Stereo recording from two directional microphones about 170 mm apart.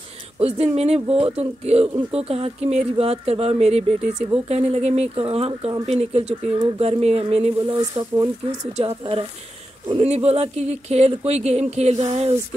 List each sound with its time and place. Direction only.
0.4 s speech: 40° right (ahead or behind); by 8.5 s 20° right (ahead or behind)
8.7 s speech: 35° right (ahead or behind)